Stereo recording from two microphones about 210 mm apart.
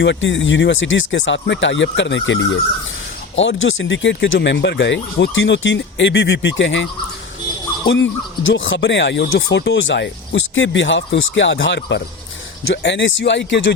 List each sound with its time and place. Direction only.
0.0 s speech: 60° left (ahead or behind)
7.9 s speech: 65° left (ahead or behind)